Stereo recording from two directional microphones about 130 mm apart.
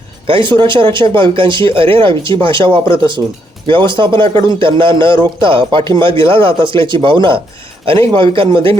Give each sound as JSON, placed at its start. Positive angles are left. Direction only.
{"t": 0.3, "sound": "a man's voice", "side_deg": -40}